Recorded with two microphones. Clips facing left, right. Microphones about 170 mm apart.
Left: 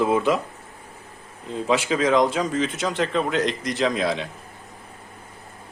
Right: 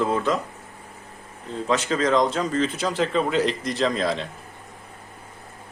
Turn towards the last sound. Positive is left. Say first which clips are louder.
# left 1 dB
turn(degrees=5)  # may be behind; listen again after turning